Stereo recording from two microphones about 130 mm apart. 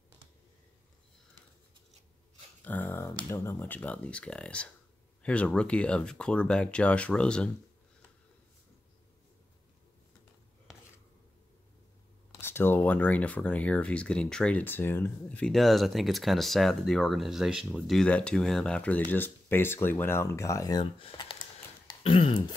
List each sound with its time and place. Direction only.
2.6 s a sound: 10° left (ahead or behind)
3.3 s speech: 20° left (ahead or behind)
12.4 s speech: 20° left (ahead or behind)
20.8 s speech: 45° left (ahead or behind)